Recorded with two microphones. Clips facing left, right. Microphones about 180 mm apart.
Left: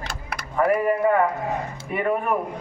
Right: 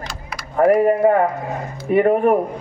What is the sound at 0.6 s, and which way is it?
A woman's voice, 40° right (ahead or behind).